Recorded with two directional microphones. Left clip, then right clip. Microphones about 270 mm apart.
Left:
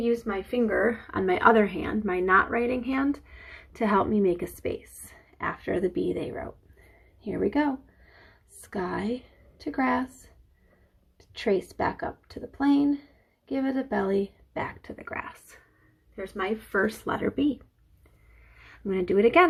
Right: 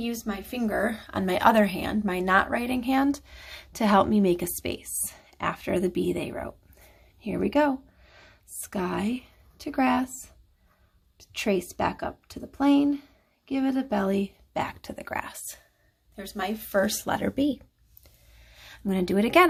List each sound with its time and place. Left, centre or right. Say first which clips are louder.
0.9 s a woman's voice: left 3 dB; right
8.7 s speech: right 1 dB; right
11.2 s a woman's voice: left 1 dB; right
18.6 s speech: left 1 dB; right